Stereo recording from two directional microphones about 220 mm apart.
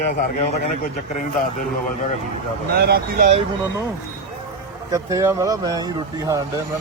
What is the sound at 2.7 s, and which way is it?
Speech, 45° right (ahead or behind).